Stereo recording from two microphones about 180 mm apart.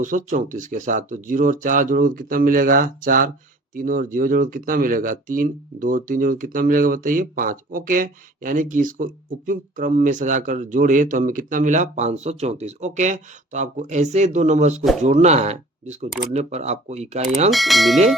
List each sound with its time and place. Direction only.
0.0 s speech: 45° right (ahead or behind)
17.5 s speech: centre (ahead or behind)